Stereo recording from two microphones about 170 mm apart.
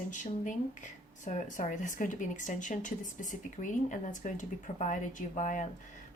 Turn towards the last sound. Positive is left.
turn(degrees=45)  # may be behind; listen again after turning